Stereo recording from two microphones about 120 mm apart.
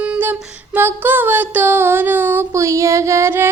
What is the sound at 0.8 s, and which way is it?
Female singing, 20° right (ahead or behind).